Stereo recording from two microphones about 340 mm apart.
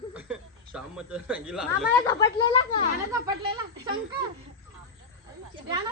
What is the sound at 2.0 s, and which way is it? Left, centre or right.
Speech, centre.